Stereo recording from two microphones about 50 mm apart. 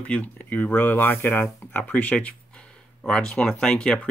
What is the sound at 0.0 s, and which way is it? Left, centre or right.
Speech, left.